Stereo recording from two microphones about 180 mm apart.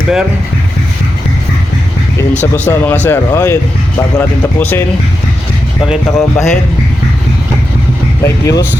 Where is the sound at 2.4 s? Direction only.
10° left (ahead or behind).